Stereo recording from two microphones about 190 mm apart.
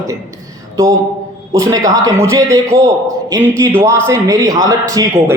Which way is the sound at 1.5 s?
15° right (ahead or behind).